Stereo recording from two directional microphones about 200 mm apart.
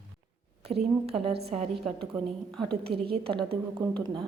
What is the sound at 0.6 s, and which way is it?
A woman's voice, 30° right (ahead or behind).